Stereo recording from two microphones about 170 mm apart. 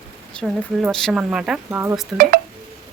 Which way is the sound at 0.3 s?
Centre (ahead or behind).